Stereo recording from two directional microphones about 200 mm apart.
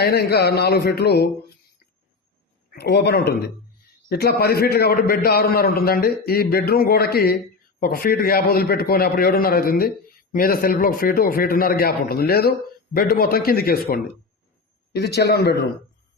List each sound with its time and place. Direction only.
0.0 s a man's voice: 55° left (ahead or behind)
2.6 s a man's voice: 55° left (ahead or behind)